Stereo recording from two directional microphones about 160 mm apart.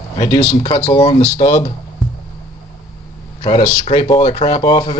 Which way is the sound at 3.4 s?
30° left (ahead or behind).